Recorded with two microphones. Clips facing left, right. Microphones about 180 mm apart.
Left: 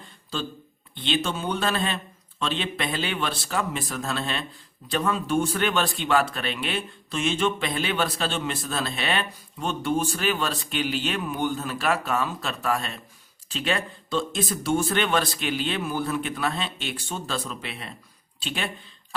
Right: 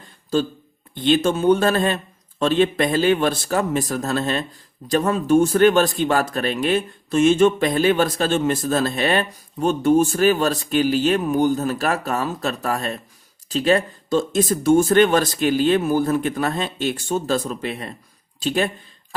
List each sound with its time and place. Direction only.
0.9 s speech: 45° right (ahead or behind)